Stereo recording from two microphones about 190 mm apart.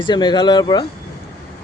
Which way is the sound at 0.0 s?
25° left (ahead or behind).